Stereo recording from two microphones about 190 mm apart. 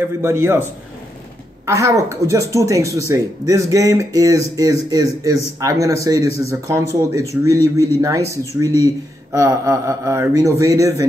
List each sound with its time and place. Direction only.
0.2 s speech: 15° right (ahead or behind)
1.7 s speech: 15° right (ahead or behind)